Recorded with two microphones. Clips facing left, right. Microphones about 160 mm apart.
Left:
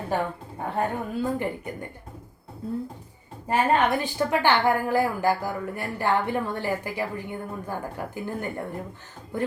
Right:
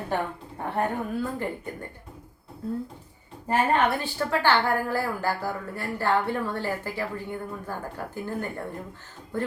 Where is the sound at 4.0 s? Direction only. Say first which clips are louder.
Left 2 dB; 15° left (ahead or behind).